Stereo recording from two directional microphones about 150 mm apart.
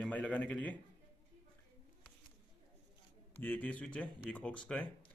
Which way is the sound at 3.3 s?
10° left (ahead or behind).